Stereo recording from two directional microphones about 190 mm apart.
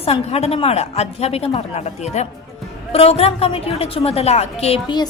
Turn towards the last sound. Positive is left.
turn(degrees=25)  # may be behind; listen again after turning